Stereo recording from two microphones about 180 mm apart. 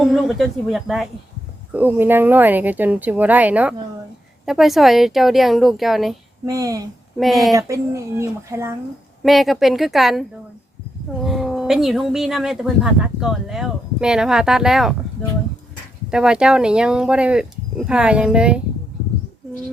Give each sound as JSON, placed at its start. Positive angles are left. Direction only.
{"t": 0.0, "sound": "speech", "side_deg": 0}
{"t": 6.4, "sound": "speech", "side_deg": -20}
{"t": 7.2, "sound": "speech", "side_deg": 0}
{"t": 7.5, "sound": "speech", "side_deg": -15}
{"t": 9.2, "sound": "speech", "side_deg": 0}
{"t": 16.1, "sound": "speech", "side_deg": -5}